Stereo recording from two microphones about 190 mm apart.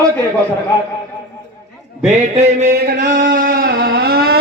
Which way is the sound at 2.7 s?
55° right (ahead or behind).